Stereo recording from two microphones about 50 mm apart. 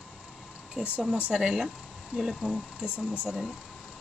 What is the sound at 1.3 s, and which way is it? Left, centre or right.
Speech, centre.